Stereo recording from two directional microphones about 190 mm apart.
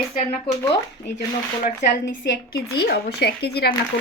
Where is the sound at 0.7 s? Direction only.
65° left (ahead or behind).